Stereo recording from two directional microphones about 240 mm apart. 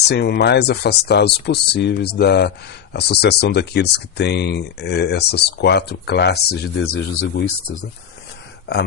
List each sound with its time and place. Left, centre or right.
0.1 s speech: left
6.8 s speech: left